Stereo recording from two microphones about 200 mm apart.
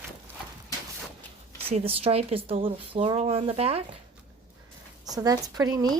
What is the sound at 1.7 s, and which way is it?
Speech, 30° right (ahead or behind).